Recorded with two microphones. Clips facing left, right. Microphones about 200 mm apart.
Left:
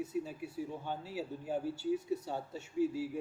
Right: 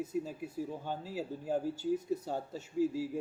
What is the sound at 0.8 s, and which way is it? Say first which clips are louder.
Speech: right 1 dB; 40° right (ahead or behind).